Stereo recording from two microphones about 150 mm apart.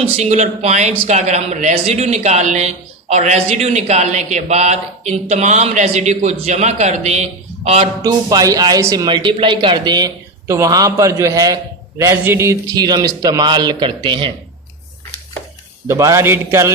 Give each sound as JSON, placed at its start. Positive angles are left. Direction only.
{"t": 0.0, "sound": "speech", "side_deg": -50}
{"t": 8.0, "sound": "speech", "side_deg": -25}
{"t": 9.0, "sound": "speech", "side_deg": -30}
{"t": 15.9, "sound": "speech", "side_deg": -20}